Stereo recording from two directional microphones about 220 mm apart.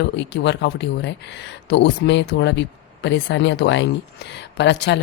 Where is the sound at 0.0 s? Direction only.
50° left (ahead or behind).